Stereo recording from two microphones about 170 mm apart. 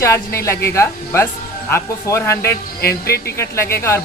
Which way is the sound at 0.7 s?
15° left (ahead or behind).